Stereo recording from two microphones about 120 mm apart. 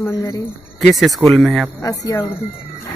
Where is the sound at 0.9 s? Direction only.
Centre (ahead or behind).